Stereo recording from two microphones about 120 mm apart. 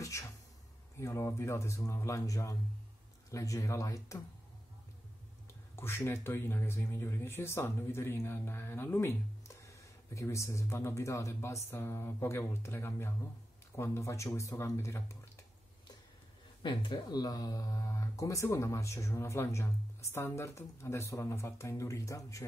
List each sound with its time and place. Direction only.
0.0 s a sound: 25° left (ahead or behind)
0.9 s speech: 25° left (ahead or behind)
5.8 s speech: 20° left (ahead or behind)
16.6 s speech: 40° left (ahead or behind)